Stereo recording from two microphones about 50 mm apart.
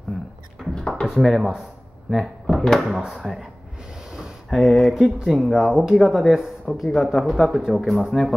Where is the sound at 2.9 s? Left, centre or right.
Centre.